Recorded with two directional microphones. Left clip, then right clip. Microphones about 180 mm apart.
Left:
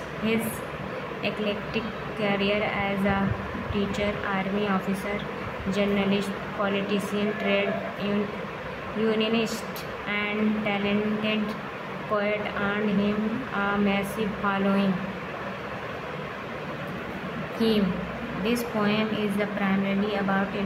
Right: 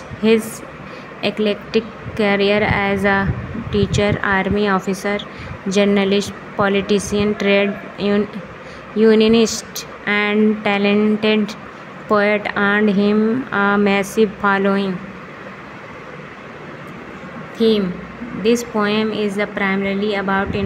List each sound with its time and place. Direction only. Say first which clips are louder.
0.2 s a woman's voice: right 12 dB; 45° right (ahead or behind)
17.6 s a woman's voice: right 9 dB; 35° right (ahead or behind)